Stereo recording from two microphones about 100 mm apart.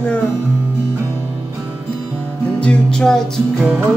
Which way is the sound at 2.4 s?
10° left (ahead or behind).